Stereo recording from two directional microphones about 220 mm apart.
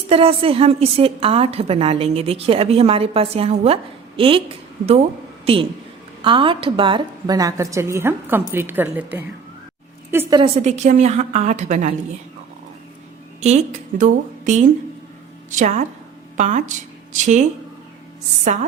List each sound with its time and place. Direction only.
0.1 s a woman's voice: 25° right (ahead or behind)
6.2 s a woman's voice: 25° right (ahead or behind)
10.6 s a woman's voice: 35° right (ahead or behind)
13.4 s a woman's voice: 30° right (ahead or behind)